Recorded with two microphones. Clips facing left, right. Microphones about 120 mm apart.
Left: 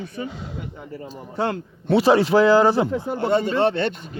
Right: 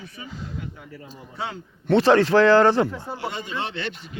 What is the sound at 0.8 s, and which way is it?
Speech, 40° left (ahead or behind).